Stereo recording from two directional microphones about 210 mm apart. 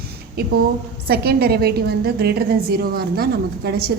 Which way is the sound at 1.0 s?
50° right (ahead or behind).